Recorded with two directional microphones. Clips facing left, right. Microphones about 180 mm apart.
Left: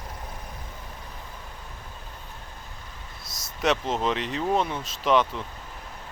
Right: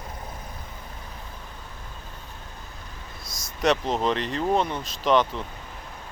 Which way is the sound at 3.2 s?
25° left (ahead or behind).